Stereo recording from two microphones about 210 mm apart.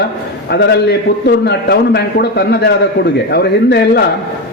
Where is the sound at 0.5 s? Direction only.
55° left (ahead or behind).